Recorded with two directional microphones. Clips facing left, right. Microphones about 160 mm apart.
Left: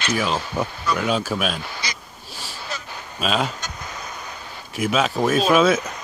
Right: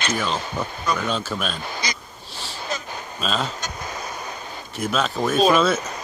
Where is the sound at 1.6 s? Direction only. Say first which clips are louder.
Right 2 dB; 45° right (ahead or behind).